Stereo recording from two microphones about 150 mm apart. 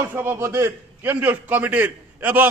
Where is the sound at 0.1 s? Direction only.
15° right (ahead or behind).